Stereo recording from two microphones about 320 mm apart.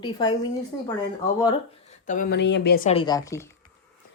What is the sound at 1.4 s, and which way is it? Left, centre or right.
Speech, left.